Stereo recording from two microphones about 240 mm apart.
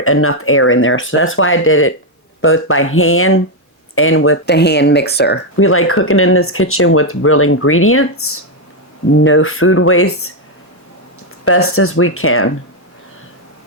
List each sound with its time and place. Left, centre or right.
0.0 s speech: left
5.6 s speech: left
11.4 s speech: left